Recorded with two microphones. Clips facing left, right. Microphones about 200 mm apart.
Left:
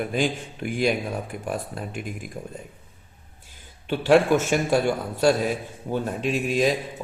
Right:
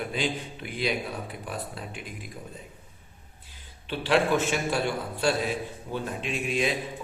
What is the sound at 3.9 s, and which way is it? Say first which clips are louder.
A man's voice: left 6 dB; 45° left (ahead or behind).